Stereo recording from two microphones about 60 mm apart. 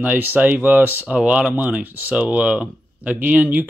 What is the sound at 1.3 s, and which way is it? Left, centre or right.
Speech, right.